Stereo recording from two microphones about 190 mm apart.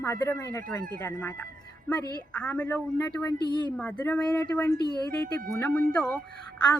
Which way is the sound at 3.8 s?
5° left (ahead or behind).